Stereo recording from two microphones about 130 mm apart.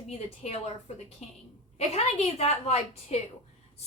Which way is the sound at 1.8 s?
55° left (ahead or behind).